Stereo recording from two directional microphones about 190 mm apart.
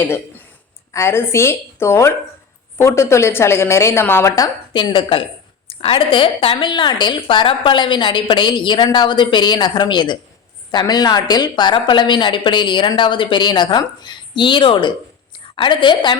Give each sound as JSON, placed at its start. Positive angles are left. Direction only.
{"t": 0.9, "sound": "a woman's voice", "side_deg": 15}